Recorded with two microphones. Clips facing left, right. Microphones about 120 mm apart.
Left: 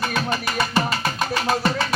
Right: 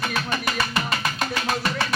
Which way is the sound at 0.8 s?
35° left (ahead or behind).